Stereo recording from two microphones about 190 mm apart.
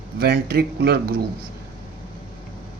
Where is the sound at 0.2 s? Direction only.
55° right (ahead or behind).